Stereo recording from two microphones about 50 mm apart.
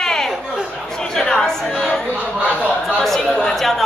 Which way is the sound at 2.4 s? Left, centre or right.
Left.